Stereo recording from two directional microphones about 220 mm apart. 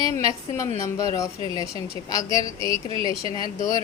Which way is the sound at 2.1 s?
25° right (ahead or behind).